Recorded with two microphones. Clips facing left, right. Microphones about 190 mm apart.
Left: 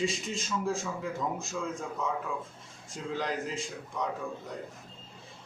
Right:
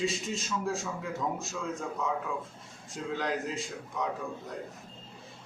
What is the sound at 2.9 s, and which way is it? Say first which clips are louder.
A man's voice: right 1 dB; centre (ahead or behind).